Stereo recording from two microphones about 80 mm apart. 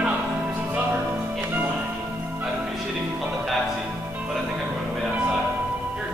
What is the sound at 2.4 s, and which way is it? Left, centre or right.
Music, centre.